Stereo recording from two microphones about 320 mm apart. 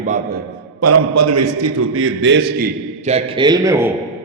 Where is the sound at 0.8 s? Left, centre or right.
Right; by 3.9 s centre.